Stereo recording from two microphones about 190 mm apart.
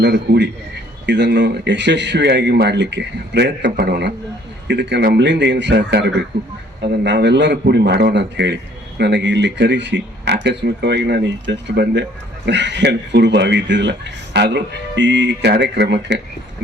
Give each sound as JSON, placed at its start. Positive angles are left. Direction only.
{"t": 0.0, "sound": "speech", "side_deg": -60}